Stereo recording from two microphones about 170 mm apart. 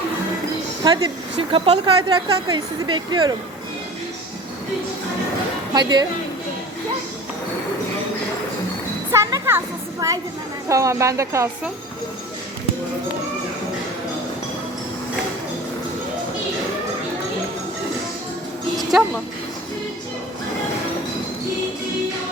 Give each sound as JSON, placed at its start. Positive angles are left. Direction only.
{"t": 0.9, "sound": "a woman's voice", "side_deg": -30}
{"t": 5.7, "sound": "a woman's voice", "side_deg": -25}
{"t": 9.1, "sound": "speech", "side_deg": -15}
{"t": 10.7, "sound": "speech", "side_deg": -20}
{"t": 18.8, "sound": "music", "side_deg": 0}